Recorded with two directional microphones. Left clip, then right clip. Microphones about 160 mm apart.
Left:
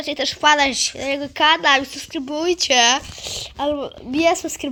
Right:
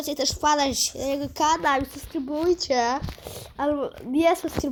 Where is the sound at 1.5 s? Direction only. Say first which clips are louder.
Left 7 dB; 35° left (ahead or behind).